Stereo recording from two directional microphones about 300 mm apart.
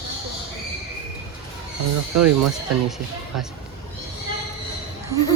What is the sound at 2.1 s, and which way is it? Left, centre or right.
Speech, right.